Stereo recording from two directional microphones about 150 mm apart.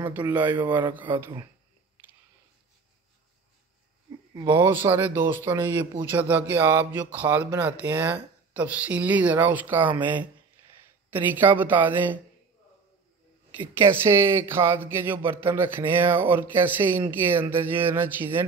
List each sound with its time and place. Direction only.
0.3 s speech: 10° right (ahead or behind)
4.3 s speech: 30° right (ahead or behind)
4.6 s speech: 15° right (ahead or behind)
13.6 s speech: 15° right (ahead or behind)